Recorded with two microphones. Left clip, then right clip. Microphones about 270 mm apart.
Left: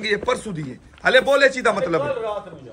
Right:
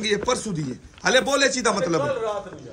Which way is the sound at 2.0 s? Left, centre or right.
Right.